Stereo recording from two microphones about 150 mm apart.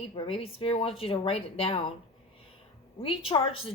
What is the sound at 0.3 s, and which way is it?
A woman's voice, 40° left (ahead or behind).